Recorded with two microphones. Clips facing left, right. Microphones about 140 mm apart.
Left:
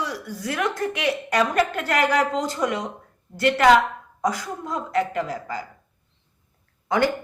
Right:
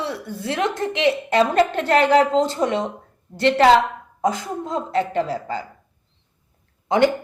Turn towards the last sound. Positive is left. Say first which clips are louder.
# right 4 dB
turn(degrees=-20)  # may be behind; listen again after turning